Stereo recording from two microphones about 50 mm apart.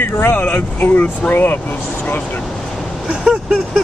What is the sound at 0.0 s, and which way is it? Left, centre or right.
Speech, left.